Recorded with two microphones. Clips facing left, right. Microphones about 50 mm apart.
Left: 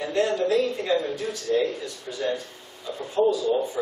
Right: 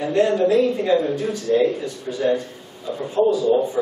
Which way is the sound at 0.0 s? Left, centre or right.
Centre.